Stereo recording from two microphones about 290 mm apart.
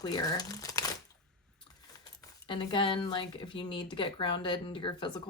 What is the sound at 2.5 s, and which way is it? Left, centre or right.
Speech, centre.